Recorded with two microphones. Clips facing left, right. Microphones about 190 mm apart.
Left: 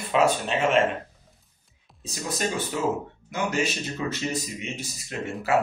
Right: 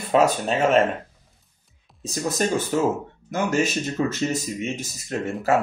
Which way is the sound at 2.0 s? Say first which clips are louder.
Right 5 dB; 45° right (ahead or behind).